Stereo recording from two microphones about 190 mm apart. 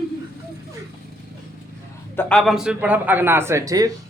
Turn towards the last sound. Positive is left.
turn(degrees=-20)  # may be behind; listen again after turning